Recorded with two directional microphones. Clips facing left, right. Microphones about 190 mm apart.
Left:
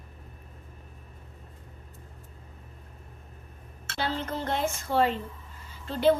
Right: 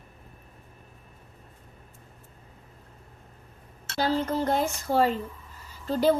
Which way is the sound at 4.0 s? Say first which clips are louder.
Right 6 dB; 35° right (ahead or behind).